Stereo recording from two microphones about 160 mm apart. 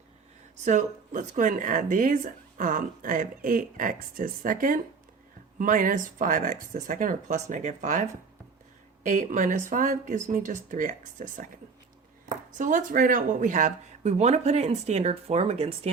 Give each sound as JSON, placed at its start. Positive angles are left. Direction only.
{"t": 0.6, "sound": "speech", "side_deg": -50}
{"t": 9.0, "sound": "speech", "side_deg": -50}